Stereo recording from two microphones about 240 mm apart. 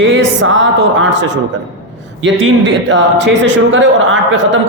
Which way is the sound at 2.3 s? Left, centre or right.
Right.